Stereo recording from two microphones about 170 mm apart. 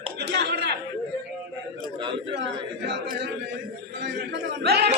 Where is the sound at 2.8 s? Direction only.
90° right.